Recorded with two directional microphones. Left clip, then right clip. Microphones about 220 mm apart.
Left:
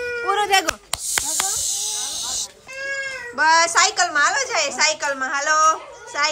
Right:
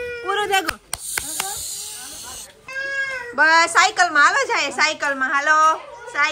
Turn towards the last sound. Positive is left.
turn(degrees=5)  # may be behind; listen again after turning